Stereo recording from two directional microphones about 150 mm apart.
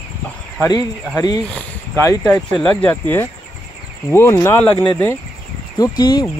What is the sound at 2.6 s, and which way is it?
Speech, 10° left (ahead or behind).